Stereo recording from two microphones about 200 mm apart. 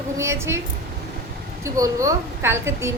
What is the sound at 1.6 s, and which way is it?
A woman's voice, 15° right (ahead or behind).